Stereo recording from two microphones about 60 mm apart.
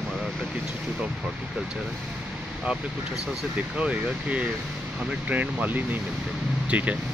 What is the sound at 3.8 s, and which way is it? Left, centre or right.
Speech, right.